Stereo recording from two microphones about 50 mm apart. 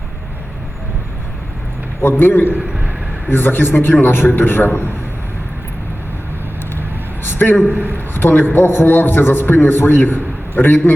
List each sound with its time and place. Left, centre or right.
2.0 s a man's voice: left
7.3 s a man's voice: left
7.7 s a man's voice: right
7.9 s a man's voice: left